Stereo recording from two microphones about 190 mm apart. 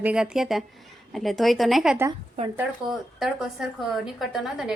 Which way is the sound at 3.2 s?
Centre (ahead or behind).